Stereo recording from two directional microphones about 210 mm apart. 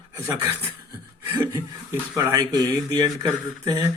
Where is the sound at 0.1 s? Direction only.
15° right (ahead or behind).